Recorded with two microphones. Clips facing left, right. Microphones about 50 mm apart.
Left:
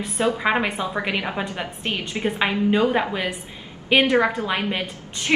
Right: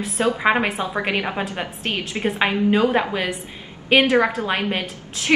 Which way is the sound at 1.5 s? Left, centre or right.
Right.